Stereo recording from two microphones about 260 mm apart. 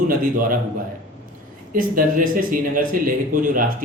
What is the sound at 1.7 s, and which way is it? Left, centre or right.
A man's voice, right.